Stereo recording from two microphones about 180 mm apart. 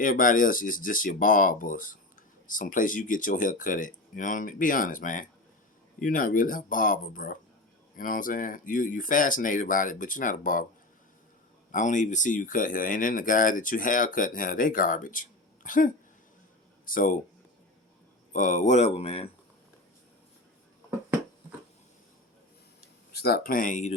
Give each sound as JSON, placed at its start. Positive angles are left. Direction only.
{"t": 0.0, "sound": "speech", "side_deg": 50}
{"t": 11.7, "sound": "speech", "side_deg": 45}
{"t": 18.3, "sound": "speech", "side_deg": 45}
{"t": 23.1, "sound": "speech", "side_deg": 60}